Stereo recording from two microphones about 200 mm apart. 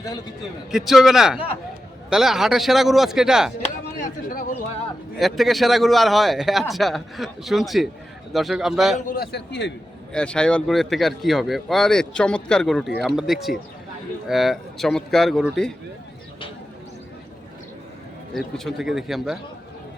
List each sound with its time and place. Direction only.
0.7 s speech: centre (ahead or behind)
4.3 s a man's voice: 40° left (ahead or behind)
5.1 s speech: centre (ahead or behind)
9.0 s a man's voice: 45° left (ahead or behind)
10.1 s speech: 5° left (ahead or behind)
18.3 s speech: centre (ahead or behind)